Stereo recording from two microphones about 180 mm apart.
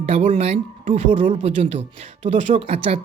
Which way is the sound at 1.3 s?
35° right (ahead or behind).